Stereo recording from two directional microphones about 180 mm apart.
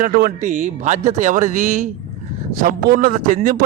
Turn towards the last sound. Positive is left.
turn(degrees=-50)  # may be behind; listen again after turning